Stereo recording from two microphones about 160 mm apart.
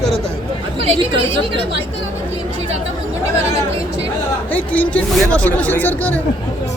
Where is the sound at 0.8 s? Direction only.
35° right (ahead or behind).